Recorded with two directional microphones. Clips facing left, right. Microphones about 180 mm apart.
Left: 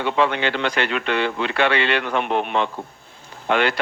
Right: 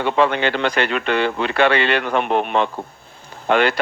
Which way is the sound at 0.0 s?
45° right (ahead or behind).